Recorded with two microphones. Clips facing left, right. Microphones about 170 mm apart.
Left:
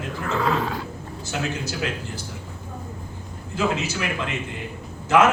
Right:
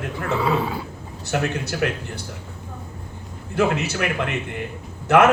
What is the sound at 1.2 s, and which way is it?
A man's voice, 60° right (ahead or behind).